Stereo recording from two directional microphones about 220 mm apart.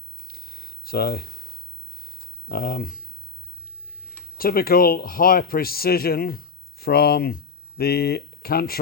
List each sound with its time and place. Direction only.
0.3 s a sound: 45° left (ahead or behind)
2.5 s speech: 40° left (ahead or behind)
4.4 s a man's voice: 40° left (ahead or behind)